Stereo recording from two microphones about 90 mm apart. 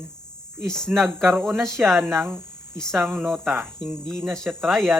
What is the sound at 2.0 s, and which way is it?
Cricket, 30° right (ahead or behind).